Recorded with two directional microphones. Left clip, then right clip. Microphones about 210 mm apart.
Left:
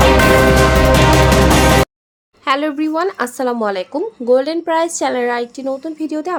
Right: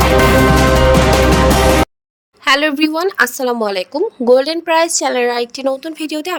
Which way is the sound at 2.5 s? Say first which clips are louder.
Right 4 dB; 35° right (ahead or behind).